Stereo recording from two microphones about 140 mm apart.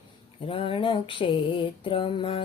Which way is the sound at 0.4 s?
40° left (ahead or behind).